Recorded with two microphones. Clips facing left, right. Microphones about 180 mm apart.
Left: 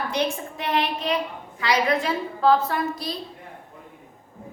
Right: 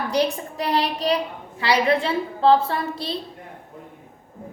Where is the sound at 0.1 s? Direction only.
35° right (ahead or behind).